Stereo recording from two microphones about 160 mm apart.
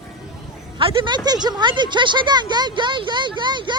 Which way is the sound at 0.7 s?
30° right (ahead or behind).